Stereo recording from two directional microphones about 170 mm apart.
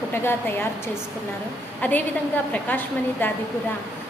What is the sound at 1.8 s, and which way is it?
A woman's voice, 10° left (ahead or behind).